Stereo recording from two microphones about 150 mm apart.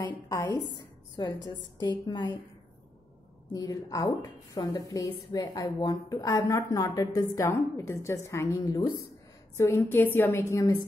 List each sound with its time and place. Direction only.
0.0 s a sound: 25° left (ahead or behind)
0.7 s a woman's voice: 30° left (ahead or behind)
3.5 s a woman's voice: 25° left (ahead or behind)